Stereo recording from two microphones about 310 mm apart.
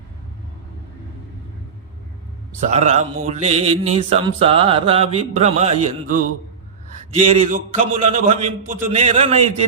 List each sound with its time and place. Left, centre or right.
2.6 s mantra: right
7.3 s mantra: right